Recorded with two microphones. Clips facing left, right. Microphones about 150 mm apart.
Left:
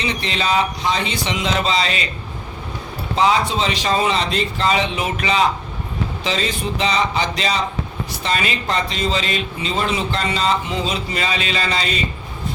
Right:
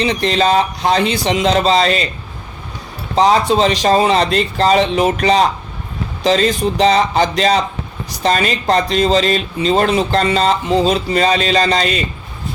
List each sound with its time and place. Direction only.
0.0 s speech: 35° right (ahead or behind)
3.2 s speech: 40° right (ahead or behind)
9.7 s speech: 55° right (ahead or behind)
10.0 s speech: 40° right (ahead or behind)